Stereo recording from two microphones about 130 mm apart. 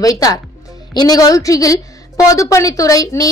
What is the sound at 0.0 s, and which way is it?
Speech, 25° left (ahead or behind).